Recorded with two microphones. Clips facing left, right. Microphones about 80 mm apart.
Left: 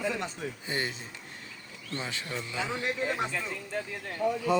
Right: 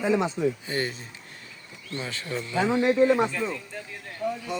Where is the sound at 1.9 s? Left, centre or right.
Centre.